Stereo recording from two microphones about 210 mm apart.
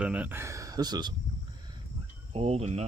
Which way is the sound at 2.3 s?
30° right (ahead or behind).